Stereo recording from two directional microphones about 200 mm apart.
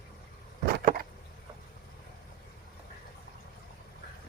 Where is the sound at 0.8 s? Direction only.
40° right (ahead or behind).